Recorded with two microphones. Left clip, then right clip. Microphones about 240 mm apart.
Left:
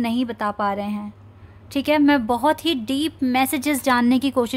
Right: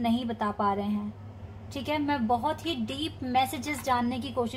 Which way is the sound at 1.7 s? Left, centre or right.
Left.